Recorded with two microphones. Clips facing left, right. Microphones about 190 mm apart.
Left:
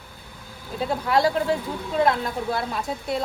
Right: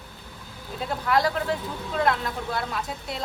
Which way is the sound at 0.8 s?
25° left (ahead or behind).